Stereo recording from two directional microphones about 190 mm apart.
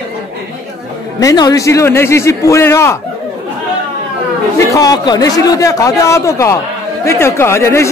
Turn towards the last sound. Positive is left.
turn(degrees=15)  # may be behind; listen again after turning